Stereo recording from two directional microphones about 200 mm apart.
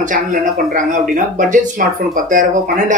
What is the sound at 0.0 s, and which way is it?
Speech, 40° right (ahead or behind).